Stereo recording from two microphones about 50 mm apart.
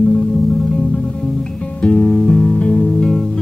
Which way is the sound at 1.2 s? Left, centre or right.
Centre.